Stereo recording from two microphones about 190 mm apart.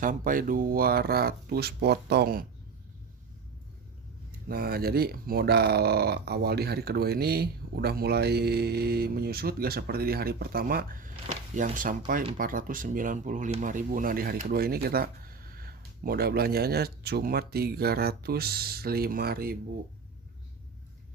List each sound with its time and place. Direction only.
0.0 s speech: 45° right (ahead or behind)
4.4 s speech: 50° right (ahead or behind)